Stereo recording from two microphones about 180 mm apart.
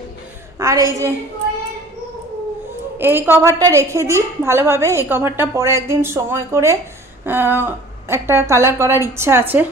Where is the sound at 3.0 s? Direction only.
10° right (ahead or behind).